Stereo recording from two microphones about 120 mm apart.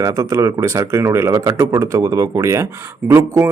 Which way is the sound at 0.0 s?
25° right (ahead or behind).